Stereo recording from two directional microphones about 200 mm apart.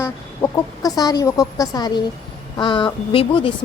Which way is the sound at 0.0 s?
15° left (ahead or behind).